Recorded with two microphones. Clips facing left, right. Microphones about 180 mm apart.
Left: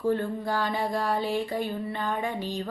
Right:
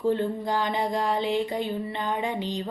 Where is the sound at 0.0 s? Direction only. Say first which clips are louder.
Right 2 dB; 20° right (ahead or behind).